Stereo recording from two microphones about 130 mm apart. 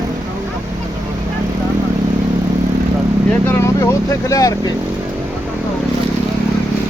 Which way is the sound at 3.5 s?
20° left (ahead or behind).